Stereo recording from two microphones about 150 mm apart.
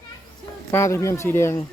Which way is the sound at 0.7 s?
15° left (ahead or behind).